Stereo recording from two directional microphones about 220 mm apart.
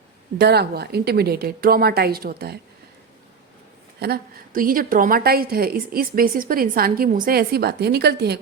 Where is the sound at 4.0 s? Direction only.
40° right (ahead or behind).